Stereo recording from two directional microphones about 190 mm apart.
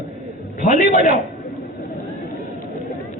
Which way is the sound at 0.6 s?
45° left (ahead or behind).